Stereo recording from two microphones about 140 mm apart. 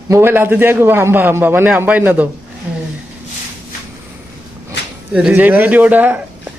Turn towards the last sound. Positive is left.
turn(degrees=-10)  # may be behind; listen again after turning